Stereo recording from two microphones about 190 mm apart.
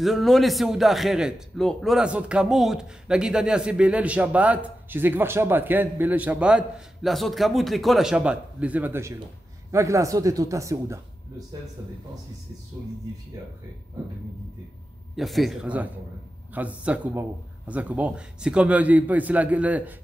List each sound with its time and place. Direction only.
0.0 s a man's voice: centre (ahead or behind); by 11.4 s 15° right (ahead or behind)
15.1 s a man's voice: centre (ahead or behind)